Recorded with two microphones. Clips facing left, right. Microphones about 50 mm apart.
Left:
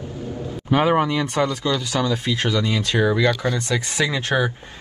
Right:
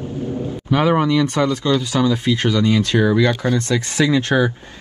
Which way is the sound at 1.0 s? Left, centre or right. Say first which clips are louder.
Right 4 dB; centre.